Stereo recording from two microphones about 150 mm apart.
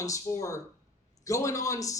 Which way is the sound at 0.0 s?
20° left (ahead or behind).